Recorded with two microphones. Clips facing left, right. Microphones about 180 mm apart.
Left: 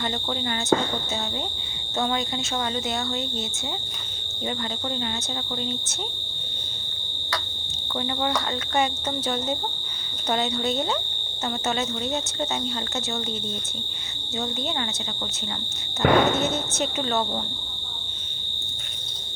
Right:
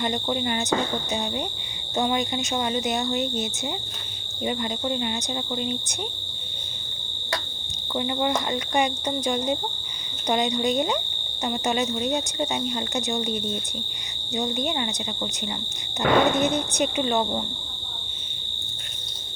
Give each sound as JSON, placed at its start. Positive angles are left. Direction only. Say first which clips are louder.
{"t": 0.0, "sound": "speech", "louder": "right 3 dB", "side_deg": -15}
{"t": 4.4, "sound": "speech", "louder": "right 3 dB", "side_deg": -15}
{"t": 7.9, "sound": "speech", "louder": "right 2 dB", "side_deg": -15}
{"t": 14.3, "sound": "speech", "louder": "right 3 dB", "side_deg": -15}
{"t": 16.0, "sound": "speech", "louder": "even", "side_deg": -15}